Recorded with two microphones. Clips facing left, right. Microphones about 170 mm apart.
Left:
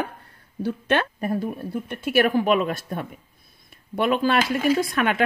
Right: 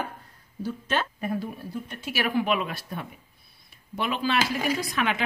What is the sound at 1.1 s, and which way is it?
Speech, 45° left (ahead or behind).